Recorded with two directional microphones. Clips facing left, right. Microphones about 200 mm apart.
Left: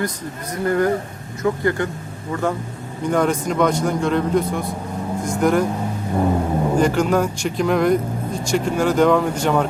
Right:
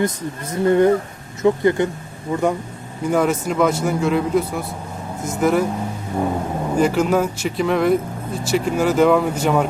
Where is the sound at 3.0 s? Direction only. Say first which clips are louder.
Right 1 dB; 5° right (ahead or behind).